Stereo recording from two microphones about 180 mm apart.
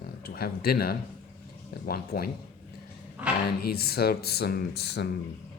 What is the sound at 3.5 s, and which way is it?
Speech, 60° left (ahead or behind).